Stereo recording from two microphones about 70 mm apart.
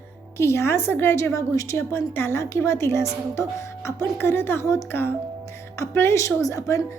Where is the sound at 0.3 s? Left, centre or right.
Left.